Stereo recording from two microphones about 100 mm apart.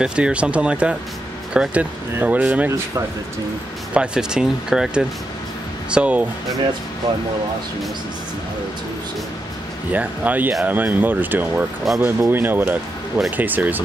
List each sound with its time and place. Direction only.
0.0 s speech: 10° right (ahead or behind)
3.9 s speech: 10° right (ahead or behind)
9.9 s speech: 15° right (ahead or behind)
11.9 s speech: centre (ahead or behind)
12.2 s speech: 20° right (ahead or behind)